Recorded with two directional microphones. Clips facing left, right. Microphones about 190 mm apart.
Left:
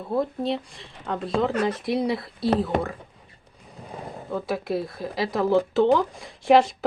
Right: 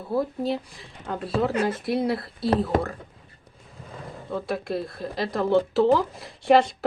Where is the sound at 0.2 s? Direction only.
Centre (ahead or behind).